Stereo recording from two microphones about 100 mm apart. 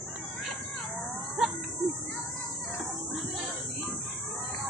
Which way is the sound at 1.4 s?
5° right (ahead or behind).